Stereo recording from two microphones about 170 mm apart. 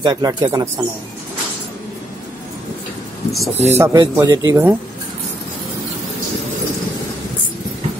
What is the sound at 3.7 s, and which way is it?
Speech, 20° right (ahead or behind).